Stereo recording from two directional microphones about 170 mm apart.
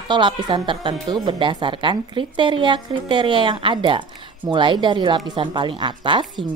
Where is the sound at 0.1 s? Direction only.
25° right (ahead or behind).